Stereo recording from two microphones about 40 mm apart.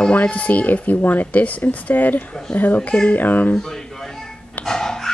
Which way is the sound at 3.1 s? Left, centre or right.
Left.